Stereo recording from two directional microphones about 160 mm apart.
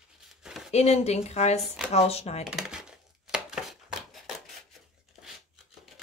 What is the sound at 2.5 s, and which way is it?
Chopping, 5° right (ahead or behind).